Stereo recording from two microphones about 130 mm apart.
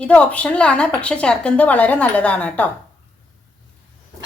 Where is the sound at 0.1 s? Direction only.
10° left (ahead or behind).